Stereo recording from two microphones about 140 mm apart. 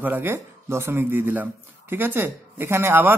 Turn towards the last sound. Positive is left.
turn(degrees=-15)  # may be behind; listen again after turning